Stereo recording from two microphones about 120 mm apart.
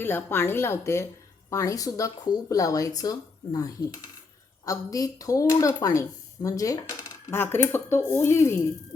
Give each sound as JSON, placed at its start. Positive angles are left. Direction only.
{"t": 0.0, "sound": "speech", "side_deg": 20}